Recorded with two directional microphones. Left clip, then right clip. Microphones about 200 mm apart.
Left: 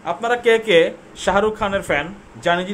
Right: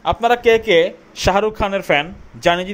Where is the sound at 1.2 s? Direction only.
35° right (ahead or behind).